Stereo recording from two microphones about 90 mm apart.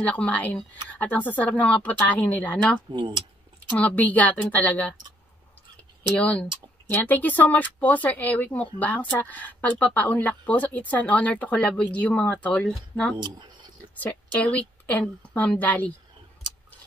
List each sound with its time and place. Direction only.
0.0 s speech: 15° left (ahead or behind)
2.9 s keys jangling: 60° right (ahead or behind)
3.7 s speech: 15° left (ahead or behind)
6.1 s speech: 15° left (ahead or behind)
13.2 s speech: 60° right (ahead or behind)
13.9 s a woman's voice: 15° left (ahead or behind)
16.5 s a sound: 55° right (ahead or behind)